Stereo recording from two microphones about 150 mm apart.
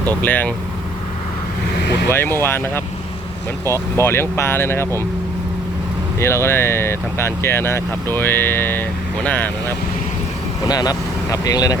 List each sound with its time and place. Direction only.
0.1 s speech: 10° left (ahead or behind)
2.0 s speech: 15° left (ahead or behind)
6.1 s speech: 15° left (ahead or behind)
10.7 s speech: 25° left (ahead or behind)